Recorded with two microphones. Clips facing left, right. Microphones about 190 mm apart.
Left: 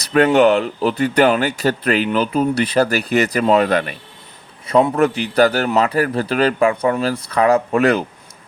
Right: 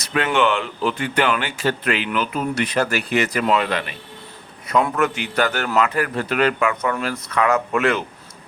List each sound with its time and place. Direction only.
0.0 s a sound: 40° left (ahead or behind)
0.3 s speech: 40° left (ahead or behind)
4.7 s speech: 35° left (ahead or behind)